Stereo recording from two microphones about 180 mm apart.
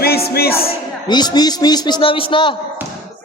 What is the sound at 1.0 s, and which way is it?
Speech, 25° left (ahead or behind).